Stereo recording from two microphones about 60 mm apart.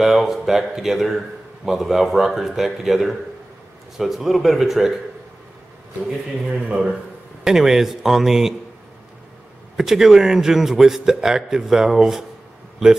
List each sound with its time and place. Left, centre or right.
0.0 s a man's voice: centre
6.5 s a man's voice: centre
7.4 s a man's voice: centre
9.8 s a man's voice: centre